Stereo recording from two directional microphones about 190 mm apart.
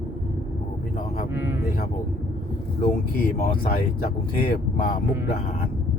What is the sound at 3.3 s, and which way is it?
Speech, 50° left (ahead or behind).